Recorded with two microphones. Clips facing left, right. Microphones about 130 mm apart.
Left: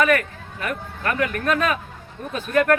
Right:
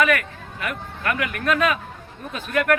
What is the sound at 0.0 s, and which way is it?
Speech, 35° left (ahead or behind).